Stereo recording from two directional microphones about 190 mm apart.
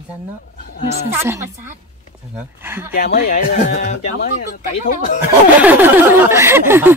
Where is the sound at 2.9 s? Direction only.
50° left (ahead or behind).